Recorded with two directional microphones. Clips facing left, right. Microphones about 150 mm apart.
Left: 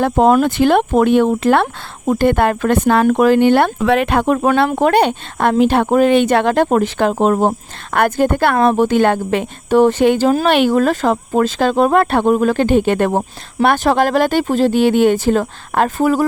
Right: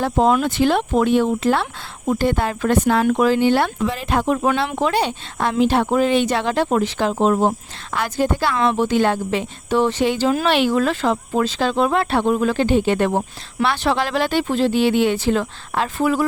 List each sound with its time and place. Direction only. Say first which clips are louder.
0.0 s a woman's voice: left 5 dB; 55° left (ahead or behind)